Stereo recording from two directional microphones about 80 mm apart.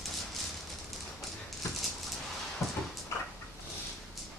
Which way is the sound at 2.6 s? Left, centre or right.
Left.